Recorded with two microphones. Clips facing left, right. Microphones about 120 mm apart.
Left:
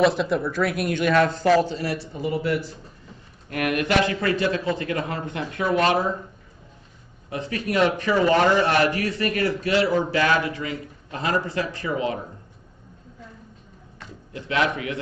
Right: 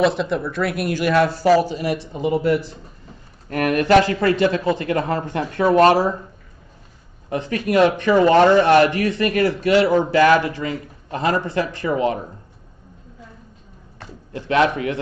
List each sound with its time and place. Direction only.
0.0 s speech: centre (ahead or behind); by 2.6 s 25° right (ahead or behind)
3.4 s a man's voice: 40° right (ahead or behind)
7.2 s speech: 30° right (ahead or behind)
7.5 s speech: 50° right (ahead or behind)
8.1 s a man's voice: 30° right (ahead or behind)
13.9 s speech: 30° right (ahead or behind)